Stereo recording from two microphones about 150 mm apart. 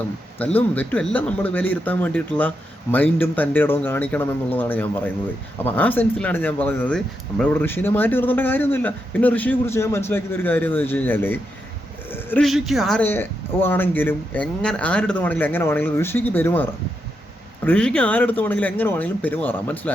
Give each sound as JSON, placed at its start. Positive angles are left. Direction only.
{"t": 0.3, "sound": "speech", "side_deg": 10}
{"t": 12.4, "sound": "speech", "side_deg": 0}
{"t": 13.0, "sound": "speech", "side_deg": 15}